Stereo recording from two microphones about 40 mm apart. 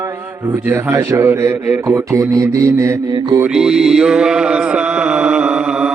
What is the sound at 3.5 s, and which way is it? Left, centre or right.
Mantra, centre.